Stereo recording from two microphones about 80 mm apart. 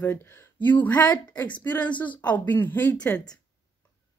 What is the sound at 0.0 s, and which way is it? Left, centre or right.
A woman's voice, left.